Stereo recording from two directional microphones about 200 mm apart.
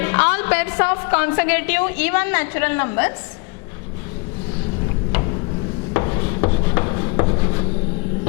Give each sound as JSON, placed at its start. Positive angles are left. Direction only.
{"t": 0.0, "sound": "a woman's voice", "side_deg": 15}
{"t": 5.9, "sound": "rub", "side_deg": 20}